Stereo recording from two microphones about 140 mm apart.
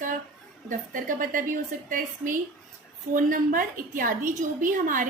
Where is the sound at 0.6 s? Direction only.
75° right (ahead or behind).